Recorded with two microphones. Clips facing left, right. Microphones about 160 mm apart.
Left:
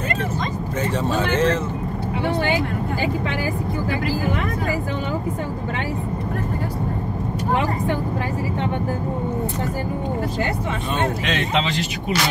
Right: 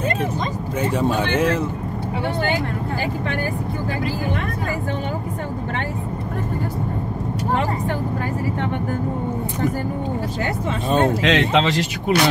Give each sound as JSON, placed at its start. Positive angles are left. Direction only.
{"t": 0.9, "sound": "speech", "side_deg": -10}
{"t": 11.2, "sound": "speech", "side_deg": -90}